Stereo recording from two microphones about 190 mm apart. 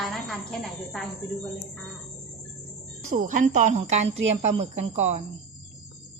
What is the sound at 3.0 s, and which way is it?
Speech, 45° right (ahead or behind).